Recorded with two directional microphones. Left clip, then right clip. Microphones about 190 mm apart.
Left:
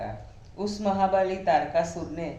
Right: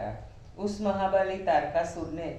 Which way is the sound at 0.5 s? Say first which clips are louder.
Left 3 dB; 45° left (ahead or behind).